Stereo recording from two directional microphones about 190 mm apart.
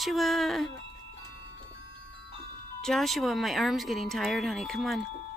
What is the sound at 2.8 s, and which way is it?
Speech, centre (ahead or behind).